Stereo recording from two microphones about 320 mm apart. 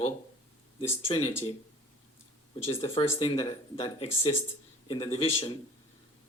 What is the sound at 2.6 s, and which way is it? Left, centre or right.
Speech, centre.